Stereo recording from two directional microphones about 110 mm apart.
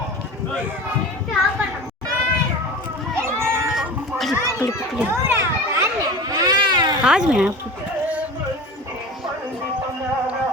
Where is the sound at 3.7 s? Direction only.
Centre (ahead or behind).